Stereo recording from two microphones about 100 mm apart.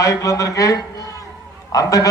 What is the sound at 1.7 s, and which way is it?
Speech, 35° left (ahead or behind).